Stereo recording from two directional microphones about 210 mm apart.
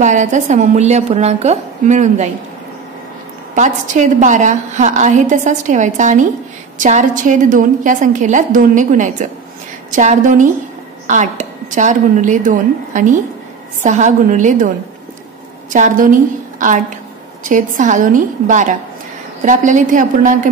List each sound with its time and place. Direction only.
0.0 s a woman's voice: 35° right (ahead or behind)
3.5 s a woman's voice: 35° right (ahead or behind)
15.7 s a woman's voice: 35° right (ahead or behind)